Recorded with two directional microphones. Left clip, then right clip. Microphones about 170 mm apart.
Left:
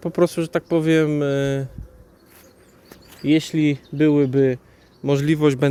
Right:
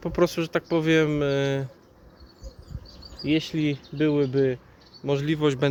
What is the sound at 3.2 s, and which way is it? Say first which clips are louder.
Speech: left 6 dB; 55° left (ahead or behind).